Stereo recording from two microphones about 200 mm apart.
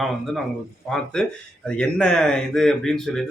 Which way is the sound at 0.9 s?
5° left (ahead or behind).